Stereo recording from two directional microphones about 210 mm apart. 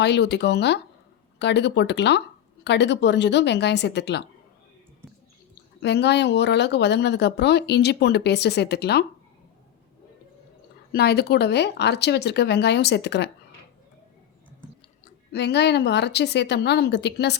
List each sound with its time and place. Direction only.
0.0 s speech: 55° left (ahead or behind)
5.8 s speech: 55° left (ahead or behind)
10.9 s speech: 50° left (ahead or behind)
15.3 s speech: 50° left (ahead or behind)